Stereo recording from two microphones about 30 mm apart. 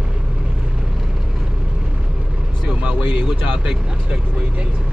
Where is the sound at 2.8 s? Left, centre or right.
Right.